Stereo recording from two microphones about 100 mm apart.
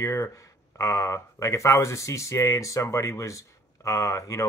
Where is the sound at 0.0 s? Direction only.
30° left (ahead or behind).